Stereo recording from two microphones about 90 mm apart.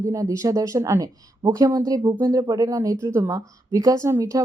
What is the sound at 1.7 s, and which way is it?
Speech, 45° right (ahead or behind).